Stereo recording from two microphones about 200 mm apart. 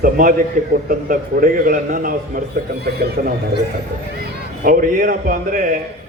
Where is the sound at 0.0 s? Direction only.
45° right (ahead or behind).